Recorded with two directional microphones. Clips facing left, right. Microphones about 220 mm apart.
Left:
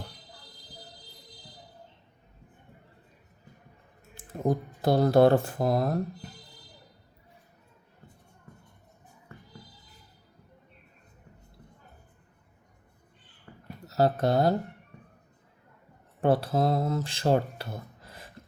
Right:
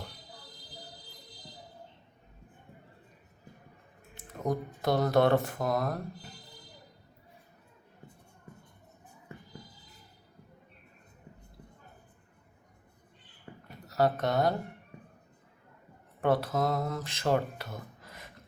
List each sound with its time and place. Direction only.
4.3 s speech: 30° left (ahead or behind)
13.5 s a sound: 20° right (ahead or behind)
13.8 s speech: 30° left (ahead or behind)
16.2 s speech: 30° left (ahead or behind)